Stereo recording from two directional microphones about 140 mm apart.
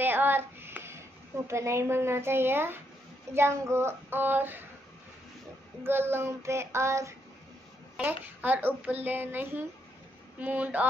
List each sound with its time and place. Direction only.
0.0 s music: 15° right (ahead or behind)
1.5 s speech: 20° right (ahead or behind)
5.9 s child singing: 15° right (ahead or behind)
8.0 s speech: 15° right (ahead or behind)